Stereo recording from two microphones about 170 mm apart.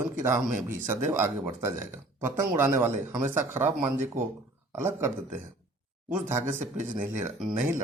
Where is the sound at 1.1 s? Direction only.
15° right (ahead or behind).